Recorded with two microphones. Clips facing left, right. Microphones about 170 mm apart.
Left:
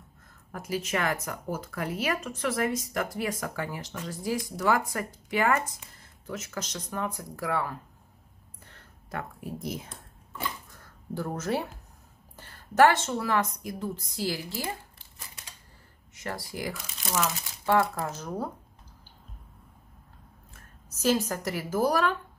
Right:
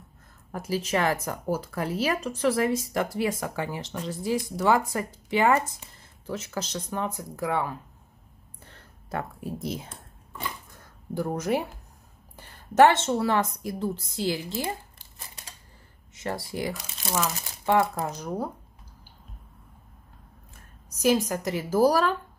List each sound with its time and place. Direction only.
0.5 s speech: 30° right (ahead or behind)
9.1 s speech: 30° right (ahead or behind)
11.1 s speech: 15° right (ahead or behind)
16.2 s speech: 25° right (ahead or behind)
21.0 s speech: 15° right (ahead or behind); by 22.1 s 35° right (ahead or behind)